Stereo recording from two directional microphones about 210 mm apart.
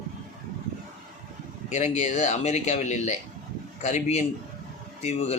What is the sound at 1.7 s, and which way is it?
Speech, 35° left (ahead or behind).